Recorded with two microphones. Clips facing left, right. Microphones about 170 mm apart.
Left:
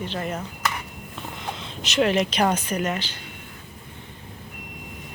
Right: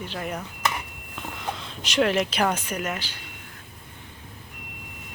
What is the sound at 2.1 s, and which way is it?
Speech, 10° right (ahead or behind).